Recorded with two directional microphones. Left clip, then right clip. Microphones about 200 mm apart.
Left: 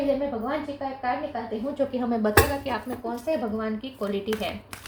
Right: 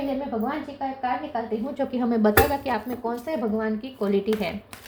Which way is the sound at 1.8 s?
45° right (ahead or behind).